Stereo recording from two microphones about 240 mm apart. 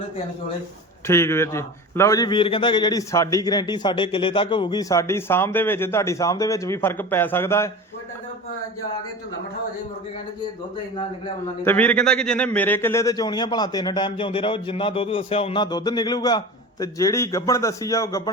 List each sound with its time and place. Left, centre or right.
1.0 s a man's voice: centre
11.6 s a man's voice: centre